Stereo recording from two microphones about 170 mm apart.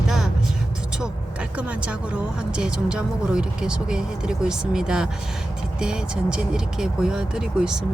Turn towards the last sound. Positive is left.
turn(degrees=-5)  # may be behind; listen again after turning